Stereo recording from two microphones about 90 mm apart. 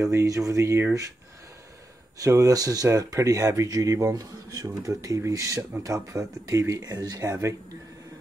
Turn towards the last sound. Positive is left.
turn(degrees=-45)  # may be behind; listen again after turning